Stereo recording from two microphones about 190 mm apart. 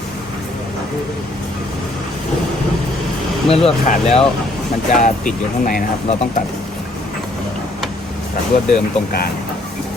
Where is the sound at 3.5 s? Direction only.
30° left (ahead or behind); by 5.8 s 45° left (ahead or behind).